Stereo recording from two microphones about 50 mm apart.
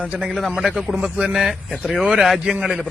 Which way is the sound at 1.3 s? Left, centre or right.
Centre.